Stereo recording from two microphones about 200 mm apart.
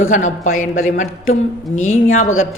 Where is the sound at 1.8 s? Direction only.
90° left.